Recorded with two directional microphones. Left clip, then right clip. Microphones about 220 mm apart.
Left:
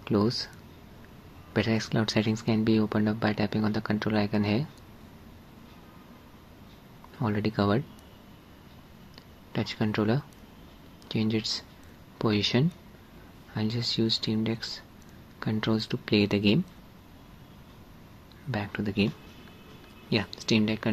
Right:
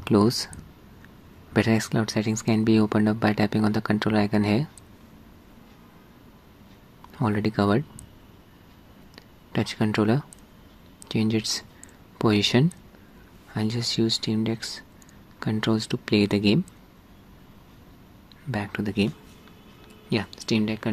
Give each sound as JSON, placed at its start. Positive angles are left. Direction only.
{"t": 0.0, "sound": "speech", "side_deg": -15}
{"t": 1.5, "sound": "speech", "side_deg": -15}
{"t": 7.2, "sound": "speech", "side_deg": -10}
{"t": 9.5, "sound": "speech", "side_deg": -10}
{"t": 18.5, "sound": "speech", "side_deg": -10}